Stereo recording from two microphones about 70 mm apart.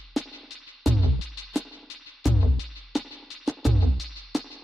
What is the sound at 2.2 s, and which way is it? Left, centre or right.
Music, centre.